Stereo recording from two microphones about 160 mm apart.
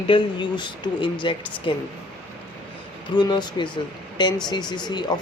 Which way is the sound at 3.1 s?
25° left (ahead or behind).